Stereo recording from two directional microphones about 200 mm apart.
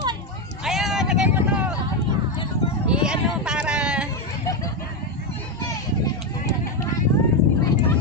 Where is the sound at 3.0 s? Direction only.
5° right (ahead or behind).